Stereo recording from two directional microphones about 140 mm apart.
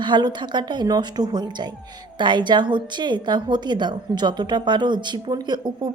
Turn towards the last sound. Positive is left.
turn(degrees=-30)  # may be behind; listen again after turning